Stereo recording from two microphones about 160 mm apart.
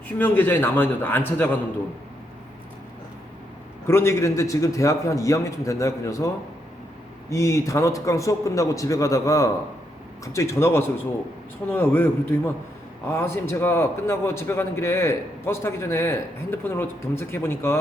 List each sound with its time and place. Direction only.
0.2 s a man's voice: 10° left (ahead or behind)
3.8 s a man's voice: 15° left (ahead or behind)